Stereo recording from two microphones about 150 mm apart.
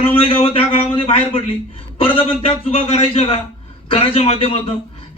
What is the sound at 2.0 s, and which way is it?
Speech, 40° left (ahead or behind).